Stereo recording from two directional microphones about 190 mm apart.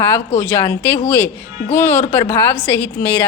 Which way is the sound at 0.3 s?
15° left (ahead or behind).